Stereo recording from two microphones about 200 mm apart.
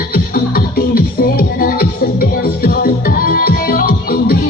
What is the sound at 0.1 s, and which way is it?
Music, 50° left (ahead or behind).